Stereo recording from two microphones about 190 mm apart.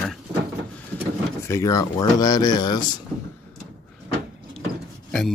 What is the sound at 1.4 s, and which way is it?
Speech, 15° left (ahead or behind).